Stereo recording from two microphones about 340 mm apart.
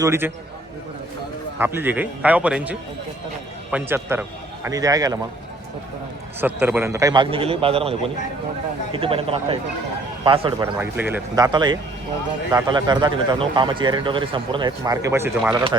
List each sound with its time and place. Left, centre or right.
0.0 s speech: centre
1.5 s a man's voice: centre
6.4 s speech: centre